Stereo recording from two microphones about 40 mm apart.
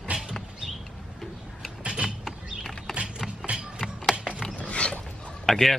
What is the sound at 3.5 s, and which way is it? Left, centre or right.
Mechanisms, right.